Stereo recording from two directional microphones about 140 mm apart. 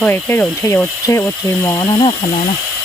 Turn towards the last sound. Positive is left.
turn(degrees=35)  # may be behind; listen again after turning